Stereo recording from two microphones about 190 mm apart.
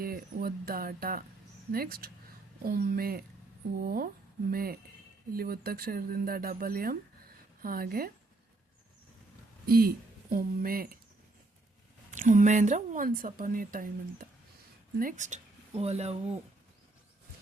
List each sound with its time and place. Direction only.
0.0 s a woman's voice: 50° right (ahead or behind)
9.6 s a woman's voice: 50° right (ahead or behind)
12.1 s a woman's voice: 45° right (ahead or behind)